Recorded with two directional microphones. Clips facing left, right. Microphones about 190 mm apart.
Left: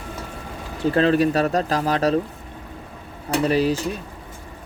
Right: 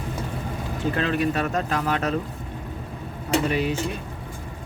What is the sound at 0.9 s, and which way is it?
Speech, 35° left (ahead or behind).